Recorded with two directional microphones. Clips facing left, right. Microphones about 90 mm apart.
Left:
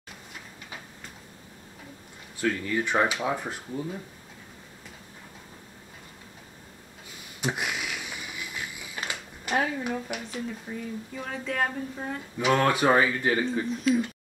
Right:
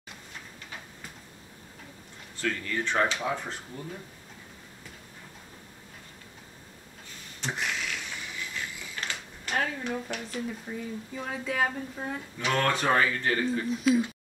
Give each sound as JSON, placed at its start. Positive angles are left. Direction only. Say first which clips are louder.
{"t": 2.3, "sound": "speech", "louder": "left 4 dB", "side_deg": 10}
{"t": 7.3, "sound": "a sound", "louder": "left 2 dB", "side_deg": 10}
{"t": 9.1, "sound": "speech", "louder": "left 4 dB", "side_deg": 5}
{"t": 13.7, "sound": "speech", "louder": "right 3 dB", "side_deg": -5}